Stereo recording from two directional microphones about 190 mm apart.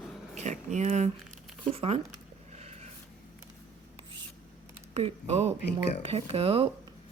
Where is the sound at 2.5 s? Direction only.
35° right (ahead or behind).